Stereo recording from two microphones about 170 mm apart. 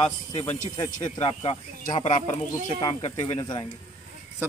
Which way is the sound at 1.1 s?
35° left (ahead or behind).